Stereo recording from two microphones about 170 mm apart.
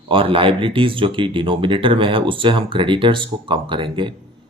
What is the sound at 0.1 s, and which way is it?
Speech, 30° right (ahead or behind).